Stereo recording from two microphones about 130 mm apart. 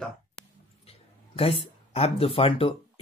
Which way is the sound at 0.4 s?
5° left (ahead or behind).